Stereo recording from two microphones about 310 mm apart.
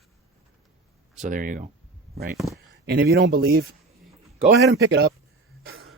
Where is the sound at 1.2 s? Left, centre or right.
Right.